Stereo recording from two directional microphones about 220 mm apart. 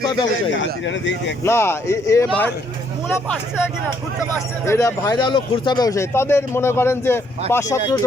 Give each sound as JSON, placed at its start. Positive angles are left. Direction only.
{"t": 0.5, "sound": "speech", "side_deg": 55}
{"t": 1.5, "sound": "speech", "side_deg": 10}
{"t": 4.6, "sound": "speech", "side_deg": 10}